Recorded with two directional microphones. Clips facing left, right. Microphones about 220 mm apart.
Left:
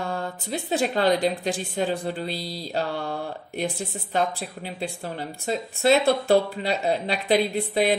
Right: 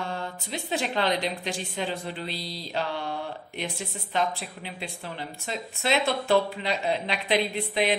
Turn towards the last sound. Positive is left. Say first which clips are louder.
# left 4 dB
turn(degrees=40)  # may be behind; listen again after turning